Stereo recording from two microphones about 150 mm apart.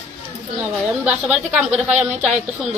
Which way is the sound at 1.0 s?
10° right (ahead or behind).